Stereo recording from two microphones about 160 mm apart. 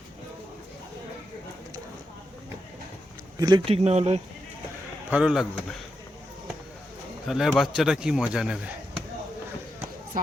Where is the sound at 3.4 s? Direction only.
30° right (ahead or behind).